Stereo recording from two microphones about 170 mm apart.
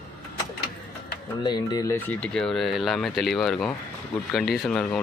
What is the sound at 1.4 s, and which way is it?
Speech, 25° left (ahead or behind).